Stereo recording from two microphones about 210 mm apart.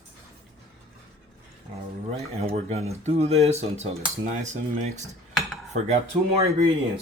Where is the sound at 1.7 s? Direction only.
30° right (ahead or behind).